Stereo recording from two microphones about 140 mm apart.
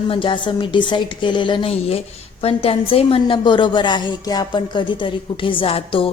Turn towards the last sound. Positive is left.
turn(degrees=40)  # may be behind; listen again after turning